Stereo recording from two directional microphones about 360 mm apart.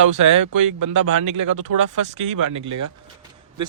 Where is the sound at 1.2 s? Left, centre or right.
Right.